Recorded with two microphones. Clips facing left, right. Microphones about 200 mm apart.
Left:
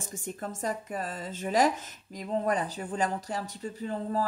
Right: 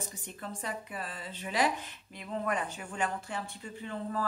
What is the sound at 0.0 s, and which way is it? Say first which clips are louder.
Speech: left 5 dB; 45° left (ahead or behind).